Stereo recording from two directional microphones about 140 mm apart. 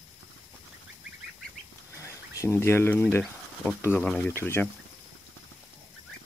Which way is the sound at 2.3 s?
20° left (ahead or behind).